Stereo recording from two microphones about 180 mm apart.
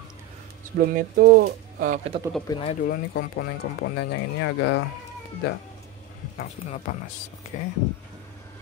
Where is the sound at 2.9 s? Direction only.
70° left (ahead or behind).